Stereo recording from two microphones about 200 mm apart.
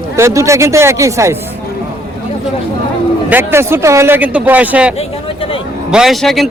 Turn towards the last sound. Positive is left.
turn(degrees=0)  # may be behind; listen again after turning